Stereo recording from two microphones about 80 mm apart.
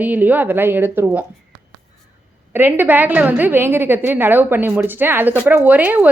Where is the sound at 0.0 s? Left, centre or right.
Right.